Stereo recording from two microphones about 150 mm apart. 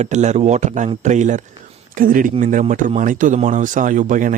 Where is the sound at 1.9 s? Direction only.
65° right (ahead or behind).